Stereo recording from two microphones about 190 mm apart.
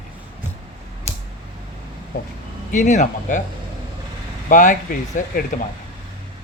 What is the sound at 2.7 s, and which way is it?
Speech, 40° left (ahead or behind).